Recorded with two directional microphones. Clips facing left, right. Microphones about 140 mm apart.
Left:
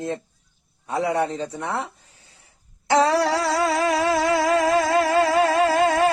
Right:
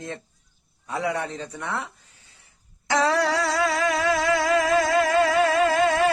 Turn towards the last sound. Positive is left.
turn(degrees=40)  # may be behind; listen again after turning